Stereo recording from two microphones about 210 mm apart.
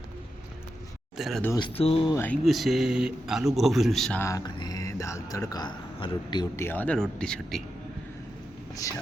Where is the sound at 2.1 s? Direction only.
10° left (ahead or behind).